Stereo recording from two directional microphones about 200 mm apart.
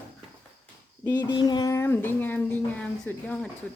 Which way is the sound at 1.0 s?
20° left (ahead or behind).